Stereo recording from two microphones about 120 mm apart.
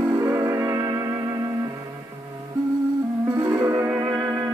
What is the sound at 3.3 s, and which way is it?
Music, 25° right (ahead or behind).